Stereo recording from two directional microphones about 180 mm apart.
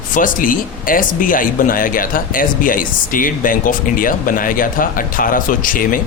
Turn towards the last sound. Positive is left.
turn(degrees=50)  # may be behind; listen again after turning